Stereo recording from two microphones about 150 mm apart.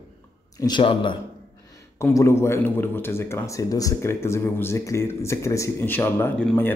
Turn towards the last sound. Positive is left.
turn(degrees=15)  # may be behind; listen again after turning